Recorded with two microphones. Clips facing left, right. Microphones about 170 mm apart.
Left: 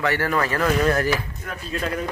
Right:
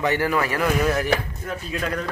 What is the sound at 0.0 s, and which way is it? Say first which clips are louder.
Speech: right 1 dB; 15° right (ahead or behind).